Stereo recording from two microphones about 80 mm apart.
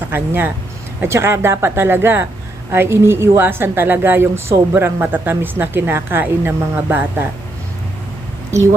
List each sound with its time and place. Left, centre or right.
0.1 s a woman's voice: right
8.4 s speech: right